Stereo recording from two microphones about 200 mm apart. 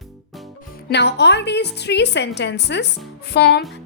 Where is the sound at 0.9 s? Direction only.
55° left (ahead or behind).